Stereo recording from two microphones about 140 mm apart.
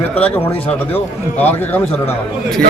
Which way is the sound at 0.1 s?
10° left (ahead or behind).